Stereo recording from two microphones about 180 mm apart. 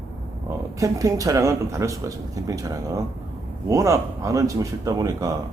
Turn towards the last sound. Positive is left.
turn(degrees=-20)  # may be behind; listen again after turning